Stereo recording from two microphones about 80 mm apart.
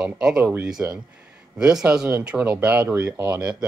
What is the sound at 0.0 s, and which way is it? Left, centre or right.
Speech, centre.